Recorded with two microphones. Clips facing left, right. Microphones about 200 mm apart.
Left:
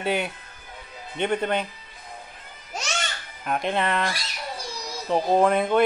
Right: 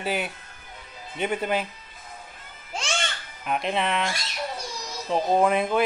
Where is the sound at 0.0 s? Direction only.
Centre (ahead or behind).